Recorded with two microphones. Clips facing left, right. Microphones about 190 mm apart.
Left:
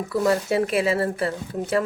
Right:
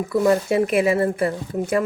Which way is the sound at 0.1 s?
15° right (ahead or behind).